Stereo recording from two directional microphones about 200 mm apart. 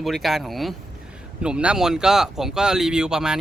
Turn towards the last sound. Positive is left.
turn(degrees=-5)  # may be behind; listen again after turning